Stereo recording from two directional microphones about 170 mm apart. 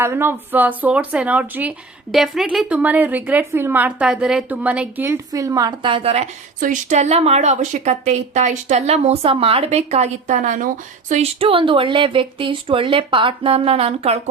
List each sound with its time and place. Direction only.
0.0 s a woman's voice: 15° right (ahead or behind); by 6.2 s 35° right (ahead or behind)
6.6 s a woman's voice: 45° right (ahead or behind)
11.1 s a woman's voice: 35° right (ahead or behind)